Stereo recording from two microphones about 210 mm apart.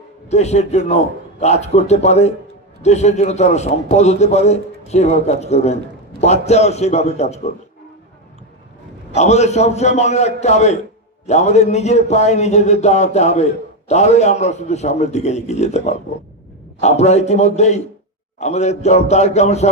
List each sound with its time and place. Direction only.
0.3 s a man's voice: 30° left (ahead or behind)
9.1 s a man's voice: 30° left (ahead or behind)
16.8 s a man's voice: 30° left (ahead or behind)